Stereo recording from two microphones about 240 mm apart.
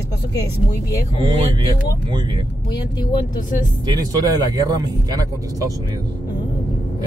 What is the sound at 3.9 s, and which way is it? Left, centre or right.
Speech, centre.